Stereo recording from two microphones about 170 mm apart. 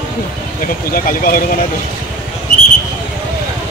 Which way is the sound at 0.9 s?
60° left (ahead or behind).